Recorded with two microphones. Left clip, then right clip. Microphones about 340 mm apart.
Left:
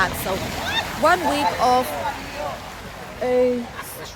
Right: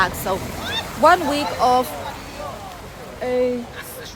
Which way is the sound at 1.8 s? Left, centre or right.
Left.